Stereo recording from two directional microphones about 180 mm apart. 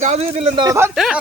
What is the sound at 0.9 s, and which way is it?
Speech, centre (ahead or behind).